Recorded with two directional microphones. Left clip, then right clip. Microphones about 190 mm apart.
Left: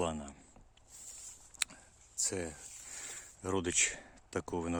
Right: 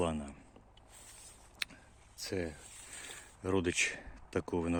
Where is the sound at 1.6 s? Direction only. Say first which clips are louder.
Left 1 dB; 15° left (ahead or behind).